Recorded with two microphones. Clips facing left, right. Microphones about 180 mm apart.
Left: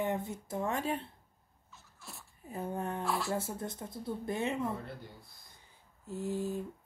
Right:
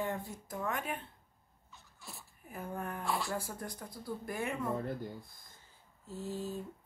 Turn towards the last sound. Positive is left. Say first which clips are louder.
# left 4 dB
turn(degrees=15)  # may be behind; listen again after turning